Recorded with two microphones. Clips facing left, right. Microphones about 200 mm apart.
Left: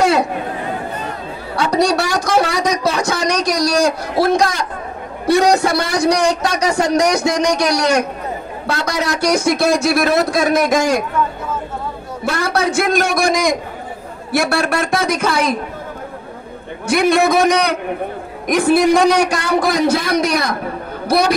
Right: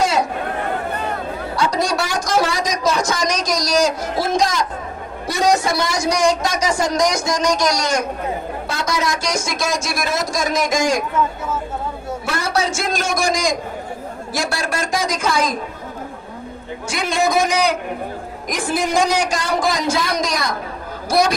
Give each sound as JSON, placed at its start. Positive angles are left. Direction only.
{"t": 0.5, "sound": "chatter", "side_deg": -60}
{"t": 1.6, "sound": "speech", "side_deg": 65}
{"t": 12.3, "sound": "speech", "side_deg": 60}
{"t": 16.8, "sound": "speech", "side_deg": 65}